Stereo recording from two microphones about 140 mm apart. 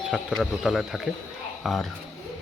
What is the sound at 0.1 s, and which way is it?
A man's voice, centre (ahead or behind).